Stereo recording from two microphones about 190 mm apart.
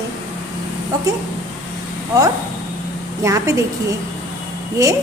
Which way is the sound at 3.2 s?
15° right (ahead or behind).